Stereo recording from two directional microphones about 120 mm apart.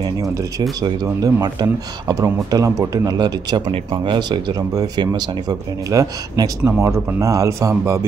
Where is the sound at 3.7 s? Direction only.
45° right (ahead or behind).